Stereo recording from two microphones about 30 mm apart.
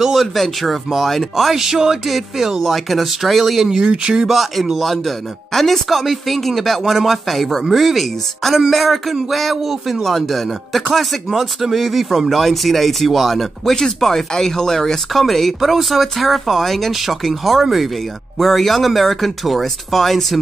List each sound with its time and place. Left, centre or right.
0.2 s speech: centre
1.5 s a man's voice: centre
3.6 s speech: centre
4.3 s a man's voice: centre
10.0 s a man's voice: centre